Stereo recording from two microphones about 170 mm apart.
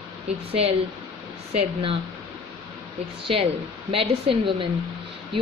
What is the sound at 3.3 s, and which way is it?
A woman's voice, 35° right (ahead or behind).